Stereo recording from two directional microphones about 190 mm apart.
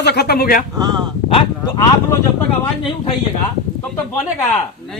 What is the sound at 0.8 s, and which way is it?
Speech, 20° right (ahead or behind).